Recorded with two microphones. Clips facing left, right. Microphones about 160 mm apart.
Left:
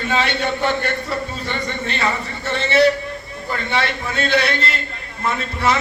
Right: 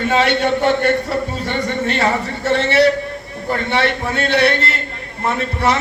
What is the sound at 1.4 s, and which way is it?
Speech, 70° right (ahead or behind).